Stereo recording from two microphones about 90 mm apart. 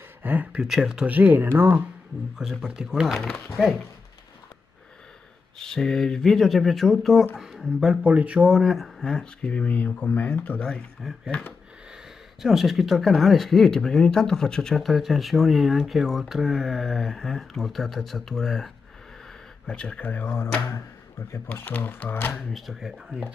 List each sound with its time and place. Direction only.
0.2 s speech: 20° right (ahead or behind)
0.7 s speech: 5° right (ahead or behind); by 1.8 s 25° right (ahead or behind)
2.6 s speech: 5° right (ahead or behind)
5.6 s speech: 5° left (ahead or behind)
8.0 s speech: 15° right (ahead or behind)
8.5 s speech: centre (ahead or behind); by 10.6 s 15° left (ahead or behind)
10.6 s speech: 5° left (ahead or behind); by 22.3 s 20° left (ahead or behind)
22.3 s speech: centre (ahead or behind)